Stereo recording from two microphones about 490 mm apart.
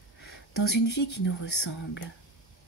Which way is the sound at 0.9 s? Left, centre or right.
Left.